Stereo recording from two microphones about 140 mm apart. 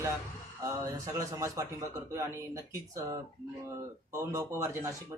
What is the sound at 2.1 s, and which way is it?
Speech, 20° right (ahead or behind).